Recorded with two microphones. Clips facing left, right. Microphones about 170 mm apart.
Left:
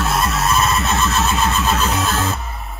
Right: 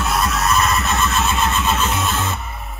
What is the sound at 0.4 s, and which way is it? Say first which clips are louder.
Music: even; 30° left (ahead or behind).